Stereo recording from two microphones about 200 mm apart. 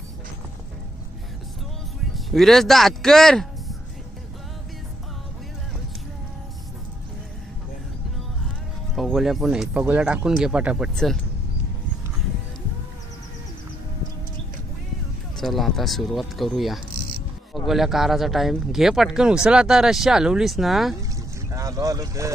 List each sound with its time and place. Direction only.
2.1 s speech: centre (ahead or behind)
8.9 s speech: centre (ahead or behind)
15.4 s speech: centre (ahead or behind)
21.5 s speech: 15° right (ahead or behind)